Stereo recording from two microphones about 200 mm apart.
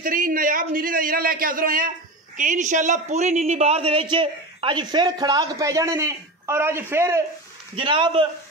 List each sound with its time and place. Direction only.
0.0 s a man's voice: 45° right (ahead or behind); by 7.2 s 15° right (ahead or behind)
7.7 s a man's voice: 25° right (ahead or behind)